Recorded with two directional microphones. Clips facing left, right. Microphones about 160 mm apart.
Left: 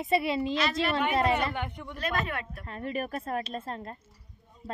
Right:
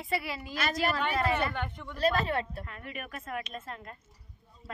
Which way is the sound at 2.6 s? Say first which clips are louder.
Left 9 dB; 35° left (ahead or behind).